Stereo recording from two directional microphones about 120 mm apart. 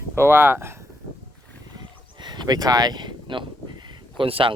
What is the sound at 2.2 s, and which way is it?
Speech, 35° right (ahead or behind).